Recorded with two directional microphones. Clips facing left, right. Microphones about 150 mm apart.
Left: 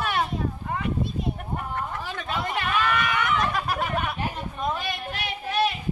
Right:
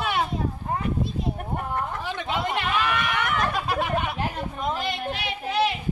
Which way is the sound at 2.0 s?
20° right (ahead or behind).